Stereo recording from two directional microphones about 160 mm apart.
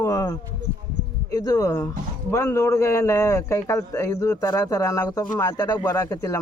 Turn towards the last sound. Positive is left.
turn(degrees=20)  # may be behind; listen again after turning